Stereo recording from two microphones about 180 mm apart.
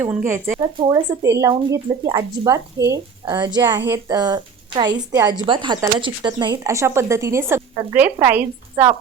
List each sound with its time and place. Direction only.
0.0 s a woman's voice: 15° right (ahead or behind)